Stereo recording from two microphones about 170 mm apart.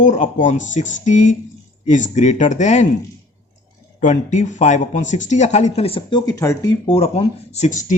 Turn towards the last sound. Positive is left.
turn(degrees=50)  # may be behind; listen again after turning